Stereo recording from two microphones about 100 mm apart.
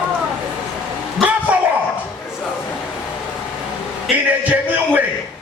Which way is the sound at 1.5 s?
15° right (ahead or behind).